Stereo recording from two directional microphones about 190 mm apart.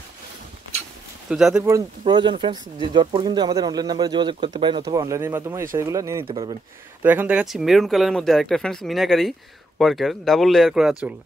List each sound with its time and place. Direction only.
1.3 s speech: 5° right (ahead or behind)
1.6 s speech: 20° right (ahead or behind)
7.0 s speech: 10° right (ahead or behind)